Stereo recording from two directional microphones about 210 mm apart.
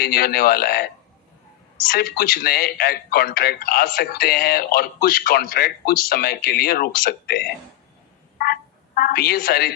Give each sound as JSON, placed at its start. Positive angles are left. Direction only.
{"t": 0.0, "sound": "a man's voice", "side_deg": 45}
{"t": 1.9, "sound": "a man's voice", "side_deg": 45}
{"t": 9.0, "sound": "a man's voice", "side_deg": 45}